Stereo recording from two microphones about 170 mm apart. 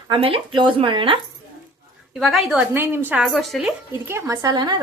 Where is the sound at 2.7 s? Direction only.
10° right (ahead or behind).